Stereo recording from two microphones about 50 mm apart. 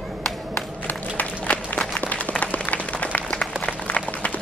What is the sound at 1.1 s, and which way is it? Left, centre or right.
Applause, left.